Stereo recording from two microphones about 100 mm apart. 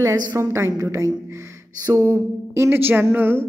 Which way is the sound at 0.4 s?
30° right (ahead or behind).